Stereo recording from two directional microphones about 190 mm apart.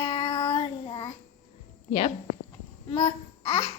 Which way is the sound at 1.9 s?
30° left (ahead or behind).